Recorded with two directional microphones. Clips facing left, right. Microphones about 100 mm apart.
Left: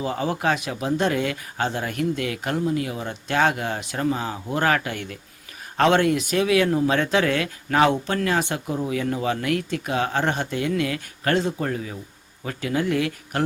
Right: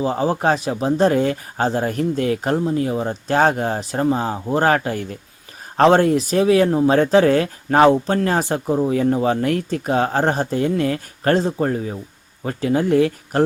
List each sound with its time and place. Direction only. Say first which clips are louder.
0.0 s speech: right 5 dB; 35° right (ahead or behind)